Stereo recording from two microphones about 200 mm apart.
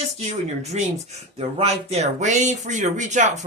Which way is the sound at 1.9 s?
35° right (ahead or behind).